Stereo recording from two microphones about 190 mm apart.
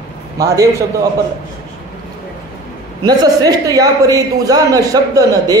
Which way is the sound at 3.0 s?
20° right (ahead or behind).